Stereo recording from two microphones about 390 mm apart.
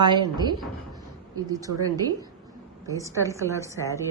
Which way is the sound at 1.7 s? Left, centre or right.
Right.